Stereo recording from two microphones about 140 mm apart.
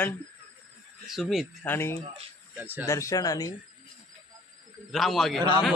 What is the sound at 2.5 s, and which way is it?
Speech, 15° right (ahead or behind).